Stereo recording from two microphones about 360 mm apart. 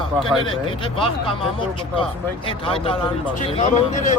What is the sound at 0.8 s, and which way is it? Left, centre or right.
Speech, centre.